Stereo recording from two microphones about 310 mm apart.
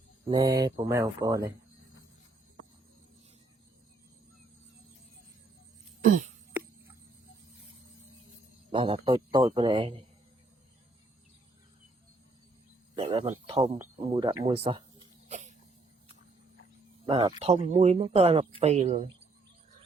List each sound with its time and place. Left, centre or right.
0.3 s a man's voice: centre
8.7 s a man's voice: centre
13.0 s speech: centre
17.1 s speech: centre